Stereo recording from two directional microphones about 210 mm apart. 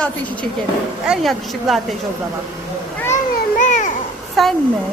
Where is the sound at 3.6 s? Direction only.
35° left (ahead or behind).